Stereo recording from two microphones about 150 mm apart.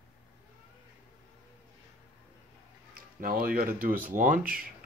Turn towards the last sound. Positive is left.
turn(degrees=-65)  # may be behind; listen again after turning